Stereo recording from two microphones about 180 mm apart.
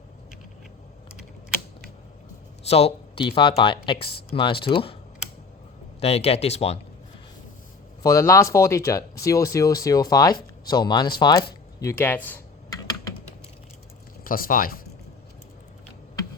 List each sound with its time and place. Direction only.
2.6 s speech: 35° left (ahead or behind)
6.0 s speech: 35° left (ahead or behind)
8.0 s speech: 15° left (ahead or behind)
14.3 s speech: 55° left (ahead or behind)